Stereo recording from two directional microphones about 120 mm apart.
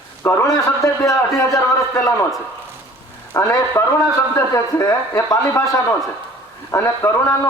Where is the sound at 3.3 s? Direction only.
20° left (ahead or behind).